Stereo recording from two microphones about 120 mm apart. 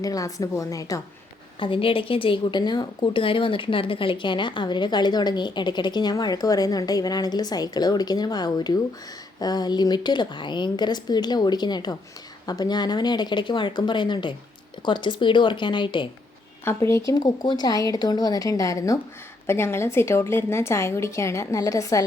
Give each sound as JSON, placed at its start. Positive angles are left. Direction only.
{"t": 0.0, "sound": "a woman's voice", "side_deg": 30}
{"t": 1.5, "sound": "speech", "side_deg": 45}
{"t": 16.6, "sound": "a woman's voice", "side_deg": 25}